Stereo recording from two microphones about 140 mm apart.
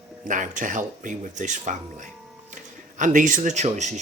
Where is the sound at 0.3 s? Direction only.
65° right (ahead or behind).